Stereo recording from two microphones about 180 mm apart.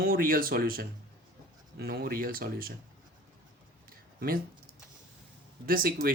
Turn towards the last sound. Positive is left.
turn(degrees=-55)  # may be behind; listen again after turning